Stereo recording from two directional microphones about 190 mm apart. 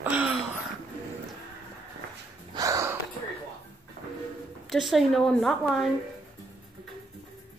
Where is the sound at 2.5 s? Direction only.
15° right (ahead or behind).